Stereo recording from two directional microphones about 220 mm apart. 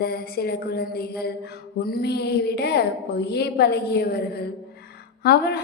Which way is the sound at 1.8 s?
45° left (ahead or behind).